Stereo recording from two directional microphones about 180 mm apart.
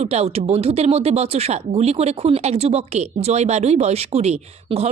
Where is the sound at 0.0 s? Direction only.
35° right (ahead or behind).